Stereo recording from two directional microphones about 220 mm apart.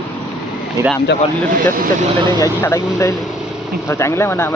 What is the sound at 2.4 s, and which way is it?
Speech, 15° left (ahead or behind).